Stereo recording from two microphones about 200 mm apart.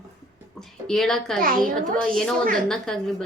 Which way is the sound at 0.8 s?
Centre (ahead or behind).